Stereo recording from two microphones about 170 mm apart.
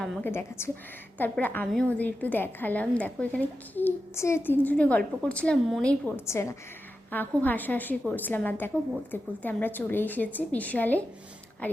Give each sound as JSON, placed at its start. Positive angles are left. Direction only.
{"t": 0.0, "sound": "a woman's voice", "side_deg": 10}